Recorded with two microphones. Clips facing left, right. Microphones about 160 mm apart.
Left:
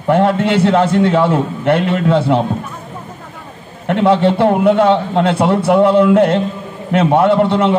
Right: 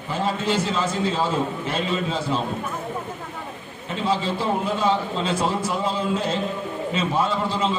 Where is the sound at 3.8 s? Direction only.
65° left (ahead or behind).